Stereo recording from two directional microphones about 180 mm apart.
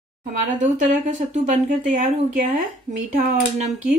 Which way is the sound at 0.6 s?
45° right (ahead or behind).